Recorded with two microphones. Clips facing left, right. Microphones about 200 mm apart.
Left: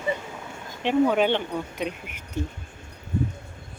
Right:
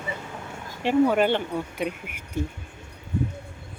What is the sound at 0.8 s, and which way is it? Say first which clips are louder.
Speech: right 1 dB; 10° right (ahead or behind).